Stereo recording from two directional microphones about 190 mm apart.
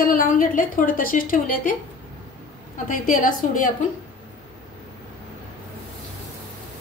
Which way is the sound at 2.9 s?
45° left (ahead or behind).